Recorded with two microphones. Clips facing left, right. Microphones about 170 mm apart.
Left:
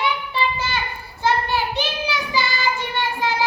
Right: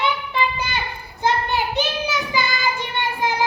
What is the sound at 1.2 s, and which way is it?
Child singing, 20° right (ahead or behind).